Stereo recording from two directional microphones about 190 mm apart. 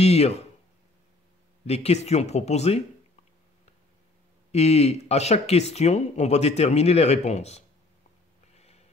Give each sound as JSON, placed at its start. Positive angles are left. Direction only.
{"t": 0.0, "sound": "speech", "side_deg": 35}
{"t": 1.7, "sound": "speech", "side_deg": 35}
{"t": 4.5, "sound": "speech", "side_deg": 35}